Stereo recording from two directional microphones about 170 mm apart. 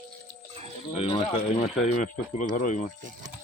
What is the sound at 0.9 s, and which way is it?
Speech, 35° left (ahead or behind).